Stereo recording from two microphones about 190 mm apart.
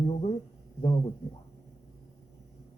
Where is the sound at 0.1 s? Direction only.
35° left (ahead or behind).